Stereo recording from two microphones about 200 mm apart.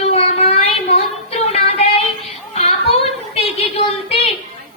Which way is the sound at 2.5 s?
30° left (ahead or behind).